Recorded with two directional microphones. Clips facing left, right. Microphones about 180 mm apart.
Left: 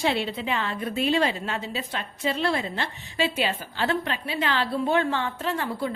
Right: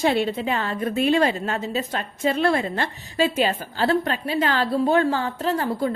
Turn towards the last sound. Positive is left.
turn(degrees=-40)  # may be behind; listen again after turning